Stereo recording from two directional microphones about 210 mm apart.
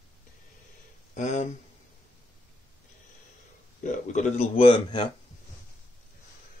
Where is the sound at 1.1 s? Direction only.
35° left (ahead or behind).